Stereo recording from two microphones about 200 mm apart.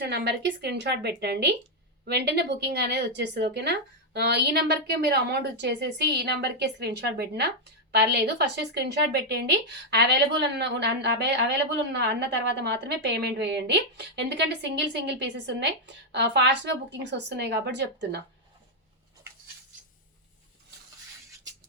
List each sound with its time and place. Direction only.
0.0 s a woman's voice: 55° right (ahead or behind)